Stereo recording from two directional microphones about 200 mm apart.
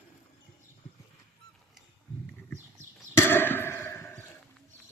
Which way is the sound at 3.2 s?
10° left (ahead or behind).